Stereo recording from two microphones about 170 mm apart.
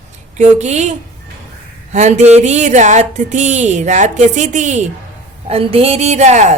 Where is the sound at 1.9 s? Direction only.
40° right (ahead or behind).